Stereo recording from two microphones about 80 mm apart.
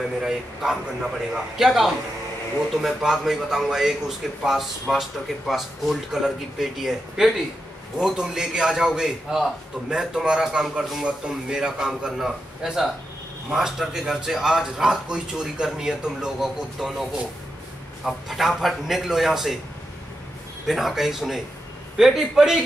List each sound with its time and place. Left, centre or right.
0.2 s a man's voice: centre
20.6 s speech: centre